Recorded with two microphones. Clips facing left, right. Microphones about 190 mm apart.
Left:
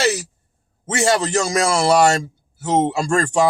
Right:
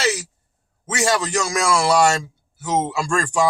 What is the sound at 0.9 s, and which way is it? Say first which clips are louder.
A man's voice: left 3 dB; 25° left (ahead or behind).